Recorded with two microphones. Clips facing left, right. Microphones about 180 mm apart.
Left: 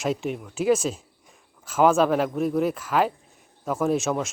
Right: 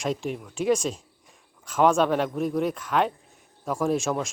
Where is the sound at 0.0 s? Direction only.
Centre (ahead or behind).